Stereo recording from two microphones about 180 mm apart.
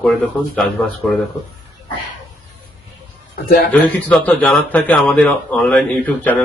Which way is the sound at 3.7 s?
10° left (ahead or behind).